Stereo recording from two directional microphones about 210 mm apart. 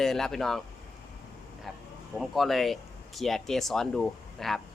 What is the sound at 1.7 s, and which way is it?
Speech, centre (ahead or behind).